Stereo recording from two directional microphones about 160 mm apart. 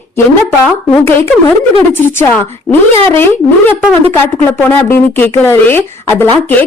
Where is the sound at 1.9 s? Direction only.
15° left (ahead or behind).